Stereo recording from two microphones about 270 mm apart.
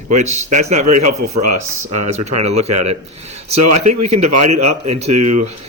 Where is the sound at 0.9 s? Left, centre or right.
Right.